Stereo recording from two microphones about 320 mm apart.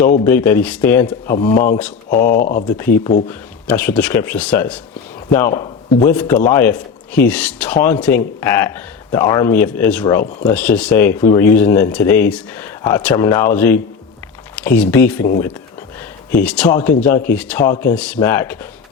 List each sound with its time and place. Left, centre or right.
0.3 s a man's voice: centre
1.5 s speech: left
2.6 s a man's voice: centre